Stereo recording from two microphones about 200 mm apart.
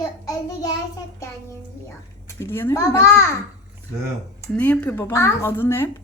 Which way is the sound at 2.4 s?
10° left (ahead or behind).